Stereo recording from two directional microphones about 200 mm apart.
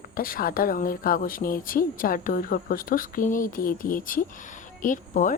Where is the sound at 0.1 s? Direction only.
45° left (ahead or behind).